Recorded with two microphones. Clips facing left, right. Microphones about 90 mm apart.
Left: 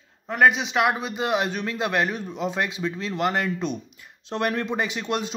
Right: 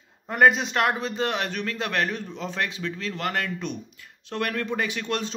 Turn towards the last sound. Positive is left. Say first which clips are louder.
# left 1 dB
turn(degrees=15)  # may be behind; listen again after turning